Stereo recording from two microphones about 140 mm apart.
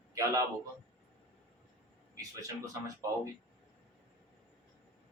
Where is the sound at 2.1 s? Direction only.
25° right (ahead or behind).